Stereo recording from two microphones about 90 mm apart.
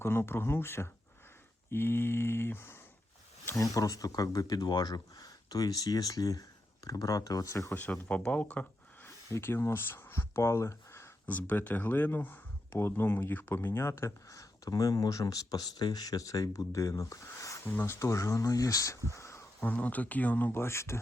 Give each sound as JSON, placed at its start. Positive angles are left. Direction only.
{"t": 0.0, "sound": "speech", "side_deg": 25}
{"t": 3.6, "sound": "speech", "side_deg": 40}
{"t": 7.7, "sound": "speech", "side_deg": 20}
{"t": 11.3, "sound": "speech", "side_deg": 20}
{"t": 17.7, "sound": "speech", "side_deg": 25}
{"t": 18.0, "sound": "speech", "side_deg": 35}
{"t": 19.1, "sound": "insect", "side_deg": 30}
{"t": 19.6, "sound": "speech", "side_deg": 15}